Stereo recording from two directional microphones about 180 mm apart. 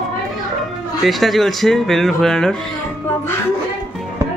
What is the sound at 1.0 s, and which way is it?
Speech, centre (ahead or behind).